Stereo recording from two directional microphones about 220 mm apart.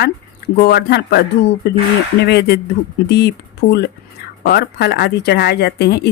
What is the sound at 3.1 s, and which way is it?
Speech, 50° left (ahead or behind).